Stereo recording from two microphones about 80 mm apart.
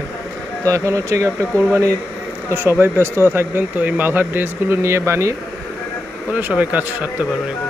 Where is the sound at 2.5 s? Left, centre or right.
Right.